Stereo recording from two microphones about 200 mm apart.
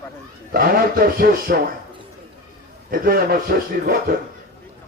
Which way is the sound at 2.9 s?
45° right (ahead or behind).